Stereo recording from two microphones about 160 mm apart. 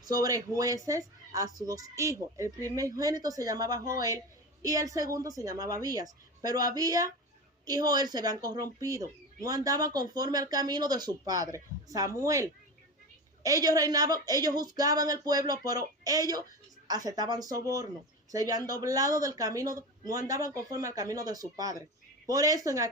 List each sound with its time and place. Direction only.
0.2 s speech: 20° right (ahead or behind)